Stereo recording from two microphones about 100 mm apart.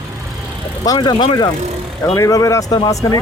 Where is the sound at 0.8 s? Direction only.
40° left (ahead or behind).